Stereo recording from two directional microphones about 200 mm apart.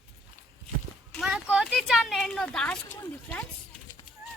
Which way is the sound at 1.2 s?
Centre (ahead or behind).